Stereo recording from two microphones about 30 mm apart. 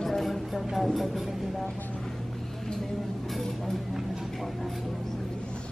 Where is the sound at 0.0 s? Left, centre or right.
Centre.